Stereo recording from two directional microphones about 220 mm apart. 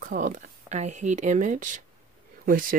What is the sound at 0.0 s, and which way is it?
Speech, 35° right (ahead or behind).